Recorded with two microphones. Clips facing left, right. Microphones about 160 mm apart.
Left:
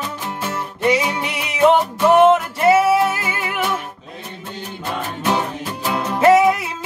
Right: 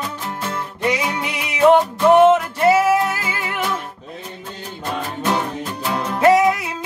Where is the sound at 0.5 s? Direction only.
Centre (ahead or behind).